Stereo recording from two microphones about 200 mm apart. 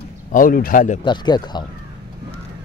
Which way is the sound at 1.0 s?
20° left (ahead or behind).